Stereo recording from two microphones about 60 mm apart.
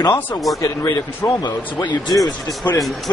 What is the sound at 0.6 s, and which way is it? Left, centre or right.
Speech, left.